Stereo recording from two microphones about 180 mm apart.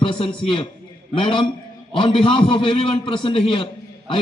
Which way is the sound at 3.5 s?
30° left (ahead or behind).